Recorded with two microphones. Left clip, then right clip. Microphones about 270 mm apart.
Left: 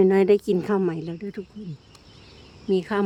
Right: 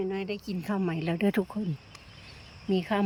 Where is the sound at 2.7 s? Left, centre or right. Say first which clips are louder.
Left 5 dB; centre.